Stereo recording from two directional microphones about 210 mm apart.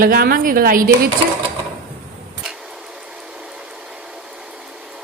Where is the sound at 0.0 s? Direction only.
45° right (ahead or behind).